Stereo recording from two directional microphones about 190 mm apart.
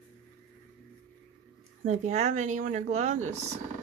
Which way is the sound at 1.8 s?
40° right (ahead or behind).